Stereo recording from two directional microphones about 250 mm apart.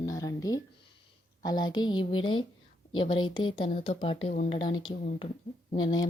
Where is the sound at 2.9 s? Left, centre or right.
Centre.